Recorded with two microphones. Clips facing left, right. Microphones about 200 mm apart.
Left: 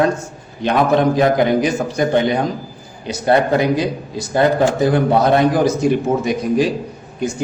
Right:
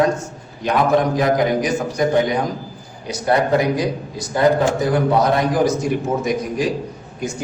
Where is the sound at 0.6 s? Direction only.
30° left (ahead or behind).